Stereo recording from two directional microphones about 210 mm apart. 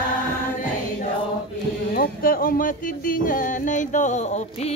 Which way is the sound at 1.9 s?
45° left (ahead or behind).